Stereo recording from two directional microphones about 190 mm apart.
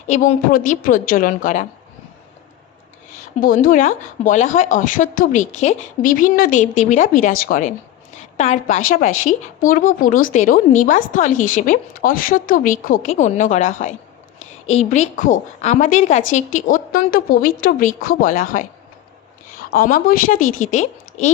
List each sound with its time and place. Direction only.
0.1 s a woman's voice: 40° left (ahead or behind)
3.4 s a woman's voice: 45° left (ahead or behind)
19.7 s a woman's voice: 50° left (ahead or behind)